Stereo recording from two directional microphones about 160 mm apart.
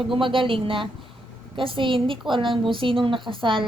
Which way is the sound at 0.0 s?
30° right (ahead or behind).